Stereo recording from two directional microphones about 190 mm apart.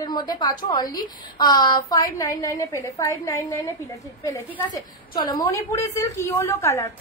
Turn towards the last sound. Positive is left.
turn(degrees=15)  # may be behind; listen again after turning